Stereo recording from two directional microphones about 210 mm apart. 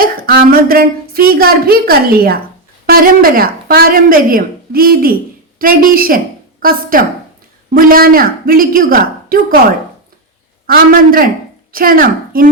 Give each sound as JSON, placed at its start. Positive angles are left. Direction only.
{"t": 0.0, "sound": "speech", "side_deg": -45}
{"t": 10.7, "sound": "a woman's voice", "side_deg": -45}